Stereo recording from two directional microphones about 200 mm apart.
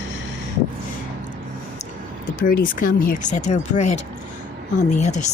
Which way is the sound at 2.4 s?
45° left (ahead or behind).